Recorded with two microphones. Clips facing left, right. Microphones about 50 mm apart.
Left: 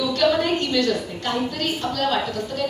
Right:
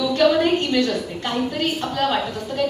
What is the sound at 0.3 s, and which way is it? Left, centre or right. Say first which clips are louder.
A woman's voice: right 3 dB; centre.